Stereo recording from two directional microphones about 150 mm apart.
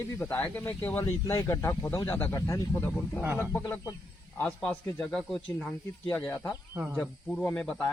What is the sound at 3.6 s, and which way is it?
Speech, 25° left (ahead or behind).